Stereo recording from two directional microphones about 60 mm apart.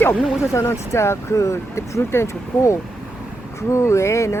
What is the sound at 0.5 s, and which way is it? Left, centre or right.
Speech, left.